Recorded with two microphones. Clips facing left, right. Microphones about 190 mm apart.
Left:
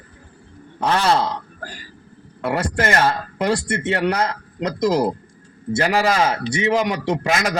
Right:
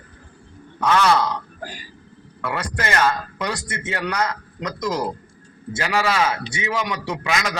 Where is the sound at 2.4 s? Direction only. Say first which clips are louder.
Left 5 dB; 45° left (ahead or behind).